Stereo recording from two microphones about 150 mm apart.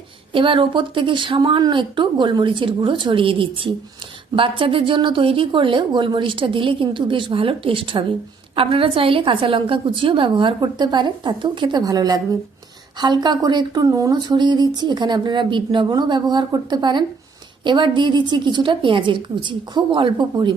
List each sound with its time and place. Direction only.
0.3 s a woman's voice: 35° right (ahead or behind)